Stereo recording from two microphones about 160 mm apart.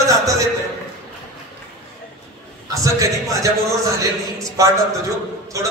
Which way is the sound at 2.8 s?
20° right (ahead or behind).